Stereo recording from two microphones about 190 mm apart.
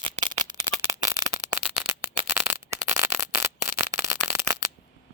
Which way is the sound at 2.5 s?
15° right (ahead or behind).